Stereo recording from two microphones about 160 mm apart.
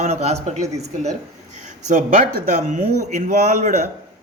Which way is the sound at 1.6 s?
50° right (ahead or behind).